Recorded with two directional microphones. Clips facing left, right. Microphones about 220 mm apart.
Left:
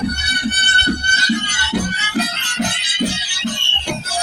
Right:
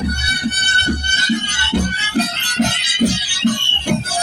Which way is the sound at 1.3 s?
25° right (ahead or behind).